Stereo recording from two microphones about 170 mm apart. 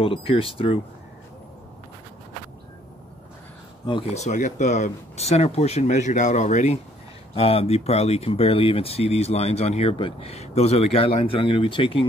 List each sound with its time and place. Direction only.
0.0 s speech: 35° left (ahead or behind)
3.8 s speech: 30° left (ahead or behind)